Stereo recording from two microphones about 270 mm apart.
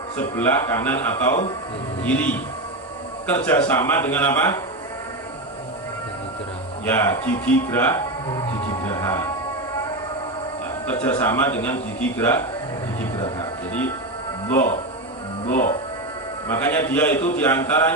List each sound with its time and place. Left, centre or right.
0.2 s a man's voice: centre
6.8 s a man's voice: centre
10.8 s a man's voice: centre
13.1 s music: centre
15.4 s speech: left
16.5 s a man's voice: centre